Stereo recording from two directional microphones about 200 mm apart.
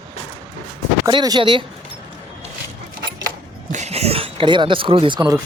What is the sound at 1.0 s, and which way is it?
Speech, 20° right (ahead or behind).